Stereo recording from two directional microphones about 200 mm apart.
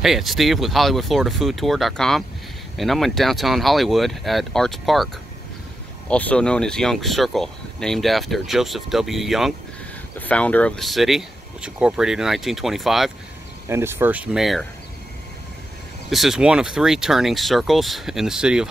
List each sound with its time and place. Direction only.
0.0 s speech: centre (ahead or behind)
13.7 s speech: 10° right (ahead or behind)
16.1 s speech: centre (ahead or behind)